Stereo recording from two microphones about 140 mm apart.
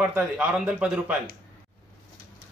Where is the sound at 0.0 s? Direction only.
10° right (ahead or behind).